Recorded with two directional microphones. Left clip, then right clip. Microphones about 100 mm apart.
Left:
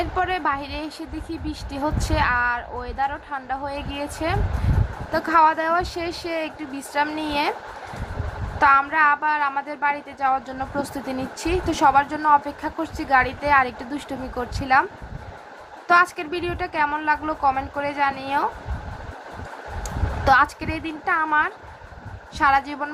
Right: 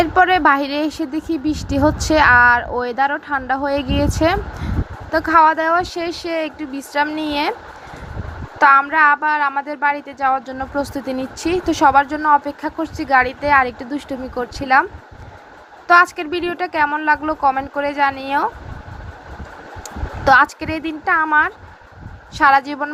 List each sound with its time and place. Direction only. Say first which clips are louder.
0.0 s speech: right 10 dB; 75° right (ahead or behind)
5.1 s speech: right 5 dB; 40° right (ahead or behind)
8.5 s a sound: right 5 dB; 45° right (ahead or behind)
8.9 s speech: right 5 dB; 50° right (ahead or behind)
15.9 s speech: right 5 dB; 50° right (ahead or behind)
20.2 s speech: right 5 dB; 45° right (ahead or behind)